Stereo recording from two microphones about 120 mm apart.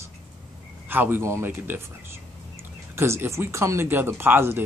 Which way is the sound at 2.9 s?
20° right (ahead or behind).